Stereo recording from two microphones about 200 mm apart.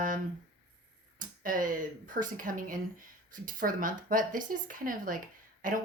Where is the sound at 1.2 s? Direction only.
45° right (ahead or behind).